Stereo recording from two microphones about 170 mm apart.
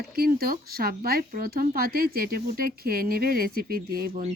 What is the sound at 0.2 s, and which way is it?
Speech, 60° right (ahead or behind).